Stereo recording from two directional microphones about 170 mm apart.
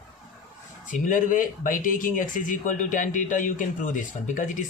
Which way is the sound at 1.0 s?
50° left (ahead or behind).